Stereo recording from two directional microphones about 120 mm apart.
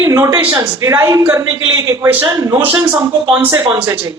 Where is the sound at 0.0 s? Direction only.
25° right (ahead or behind).